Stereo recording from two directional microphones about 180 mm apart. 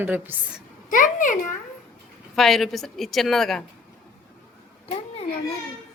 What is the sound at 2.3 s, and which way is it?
A woman's voice, centre (ahead or behind).